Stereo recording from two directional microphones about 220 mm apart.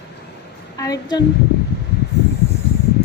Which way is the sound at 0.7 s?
15° left (ahead or behind).